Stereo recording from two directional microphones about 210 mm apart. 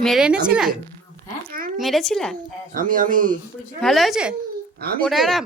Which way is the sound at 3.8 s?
Centre (ahead or behind).